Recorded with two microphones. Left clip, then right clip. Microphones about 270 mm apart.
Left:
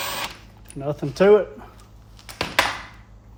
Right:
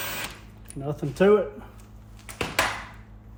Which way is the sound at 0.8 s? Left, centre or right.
Left.